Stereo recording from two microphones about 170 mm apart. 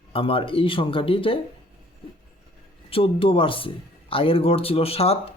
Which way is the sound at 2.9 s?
30° left (ahead or behind).